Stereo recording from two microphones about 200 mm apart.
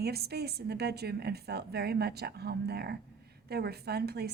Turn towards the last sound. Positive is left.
turn(degrees=-50)  # may be behind; listen again after turning